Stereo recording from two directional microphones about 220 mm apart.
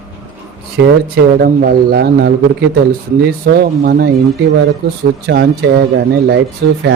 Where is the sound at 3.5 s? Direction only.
40° right (ahead or behind).